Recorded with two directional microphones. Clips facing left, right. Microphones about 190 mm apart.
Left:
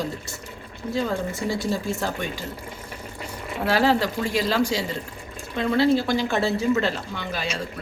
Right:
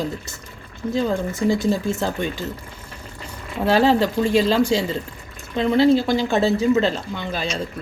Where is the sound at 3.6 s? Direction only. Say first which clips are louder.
Right 4 dB; 20° right (ahead or behind).